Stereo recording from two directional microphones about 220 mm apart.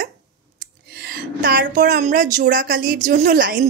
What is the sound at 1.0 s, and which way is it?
Speech, 45° right (ahead or behind).